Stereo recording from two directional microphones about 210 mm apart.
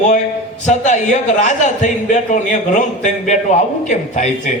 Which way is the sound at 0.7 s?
35° left (ahead or behind).